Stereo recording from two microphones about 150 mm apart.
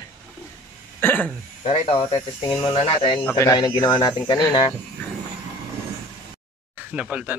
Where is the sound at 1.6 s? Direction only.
45° left (ahead or behind).